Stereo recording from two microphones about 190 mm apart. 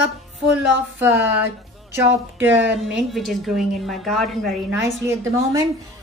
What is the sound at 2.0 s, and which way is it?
A woman's voice, 10° right (ahead or behind).